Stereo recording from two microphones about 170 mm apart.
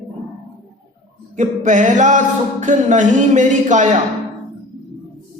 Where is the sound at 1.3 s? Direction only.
45° right (ahead or behind).